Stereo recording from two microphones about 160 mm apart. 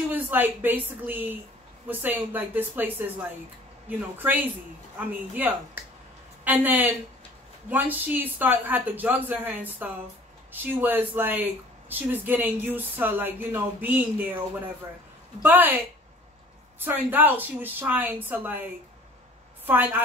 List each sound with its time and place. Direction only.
0.1 s speech: 10° right (ahead or behind)
15.4 s speech: 10° right (ahead or behind)
16.8 s speech: 10° right (ahead or behind)
19.6 s a woman's voice: 10° right (ahead or behind)